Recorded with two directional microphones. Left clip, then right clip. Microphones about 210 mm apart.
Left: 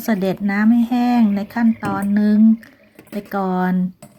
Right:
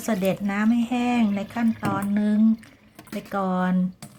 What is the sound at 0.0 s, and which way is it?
Speech, 15° left (ahead or behind).